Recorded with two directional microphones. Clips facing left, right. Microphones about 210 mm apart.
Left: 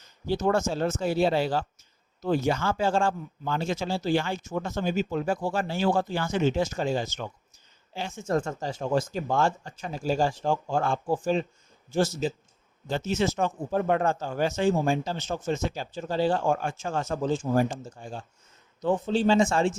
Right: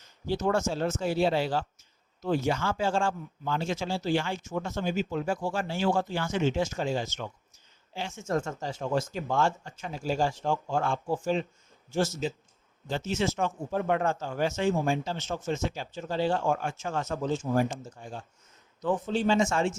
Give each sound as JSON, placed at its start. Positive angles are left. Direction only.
{"t": 0.3, "sound": "speech", "side_deg": 40}